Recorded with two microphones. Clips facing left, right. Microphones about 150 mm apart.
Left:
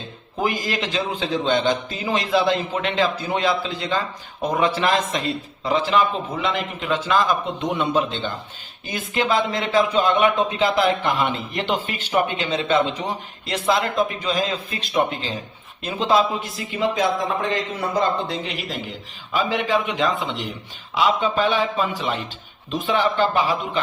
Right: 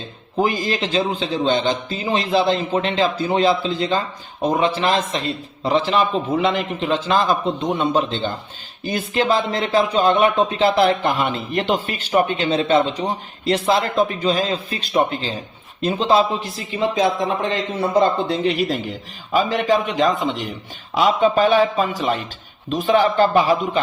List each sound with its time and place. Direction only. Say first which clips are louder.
0.4 s a man's voice: right 1 dB; 25° right (ahead or behind); by 23.8 s 40° right (ahead or behind)